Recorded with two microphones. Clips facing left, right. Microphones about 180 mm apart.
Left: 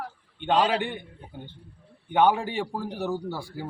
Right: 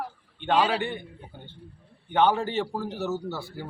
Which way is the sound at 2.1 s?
15° left (ahead or behind).